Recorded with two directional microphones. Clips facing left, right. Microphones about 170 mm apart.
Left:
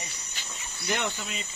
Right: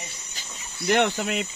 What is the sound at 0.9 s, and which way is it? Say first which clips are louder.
Cricket: right 9 dB; 80° right.